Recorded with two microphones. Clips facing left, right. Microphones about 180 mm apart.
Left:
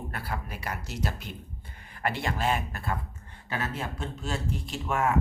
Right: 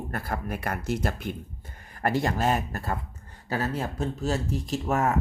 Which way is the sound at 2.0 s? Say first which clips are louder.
Right 4 dB; 40° right (ahead or behind).